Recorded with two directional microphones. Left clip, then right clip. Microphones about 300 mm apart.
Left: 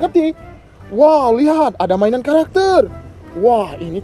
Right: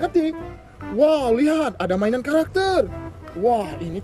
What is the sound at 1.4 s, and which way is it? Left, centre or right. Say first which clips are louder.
Speech: left 7 dB; left.